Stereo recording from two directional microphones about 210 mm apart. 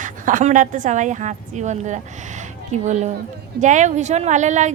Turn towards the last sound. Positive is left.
turn(degrees=-35)  # may be behind; listen again after turning